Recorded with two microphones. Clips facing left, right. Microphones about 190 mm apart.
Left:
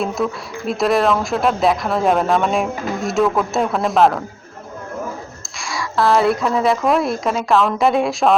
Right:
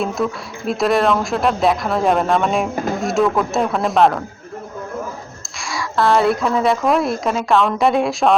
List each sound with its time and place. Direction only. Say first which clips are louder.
0.0 s a woman's voice: even; centre (ahead or behind)
5.5 s a woman's voice: even; centre (ahead or behind)